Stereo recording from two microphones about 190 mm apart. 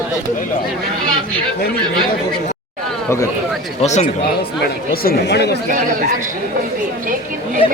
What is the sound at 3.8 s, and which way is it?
Speech, 35° left (ahead or behind).